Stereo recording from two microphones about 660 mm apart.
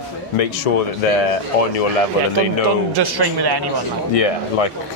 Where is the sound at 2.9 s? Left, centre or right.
Right.